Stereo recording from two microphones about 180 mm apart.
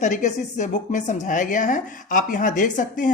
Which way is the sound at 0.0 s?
45° left (ahead or behind).